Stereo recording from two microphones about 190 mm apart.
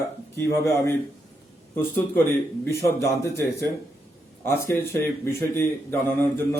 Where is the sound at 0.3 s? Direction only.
15° left (ahead or behind).